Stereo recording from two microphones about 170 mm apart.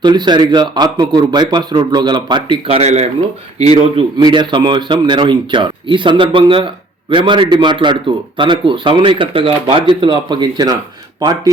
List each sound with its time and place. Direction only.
0.0 s a man's voice: 25° right (ahead or behind)